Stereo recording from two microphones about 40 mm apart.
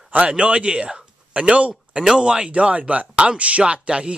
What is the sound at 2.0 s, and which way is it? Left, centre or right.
Speech, centre.